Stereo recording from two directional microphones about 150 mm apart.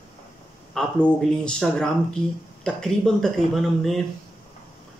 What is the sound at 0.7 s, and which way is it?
Speech, 5° left (ahead or behind).